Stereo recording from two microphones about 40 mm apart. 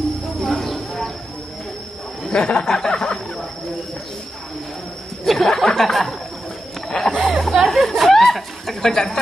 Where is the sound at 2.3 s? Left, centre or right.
Left.